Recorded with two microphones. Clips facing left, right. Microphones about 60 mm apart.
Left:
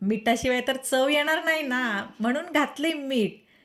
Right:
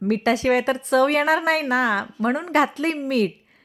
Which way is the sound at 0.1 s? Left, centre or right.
Right.